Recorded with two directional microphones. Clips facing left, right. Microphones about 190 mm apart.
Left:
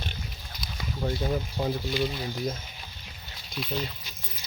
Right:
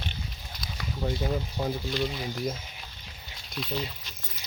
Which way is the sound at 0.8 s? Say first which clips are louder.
Left 1 dB; centre (ahead or behind).